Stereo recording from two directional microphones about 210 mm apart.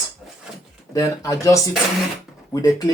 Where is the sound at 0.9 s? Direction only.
15° left (ahead or behind).